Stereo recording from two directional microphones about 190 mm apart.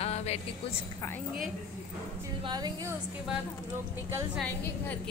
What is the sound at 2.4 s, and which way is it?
Speech, 25° right (ahead or behind).